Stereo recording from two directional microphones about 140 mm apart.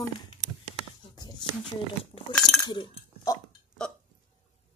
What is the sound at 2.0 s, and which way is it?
Chink, 40° left (ahead or behind).